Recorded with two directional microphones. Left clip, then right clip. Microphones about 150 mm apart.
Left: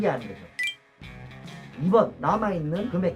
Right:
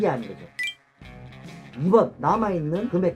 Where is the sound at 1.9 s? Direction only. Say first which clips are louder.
Right 2 dB; 45° right (ahead or behind).